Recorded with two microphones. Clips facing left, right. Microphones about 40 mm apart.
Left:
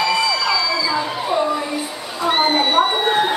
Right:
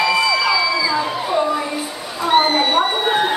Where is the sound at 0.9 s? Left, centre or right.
Centre.